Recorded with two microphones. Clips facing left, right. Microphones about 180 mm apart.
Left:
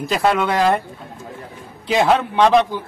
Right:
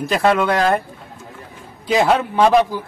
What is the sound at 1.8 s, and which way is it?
Speech, centre (ahead or behind).